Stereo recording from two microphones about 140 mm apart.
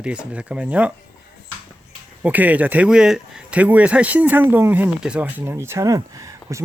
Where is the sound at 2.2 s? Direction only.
10° right (ahead or behind).